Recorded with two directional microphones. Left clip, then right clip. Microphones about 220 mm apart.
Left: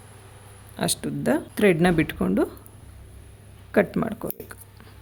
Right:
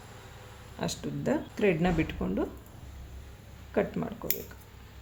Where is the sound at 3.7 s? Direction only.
55° left (ahead or behind).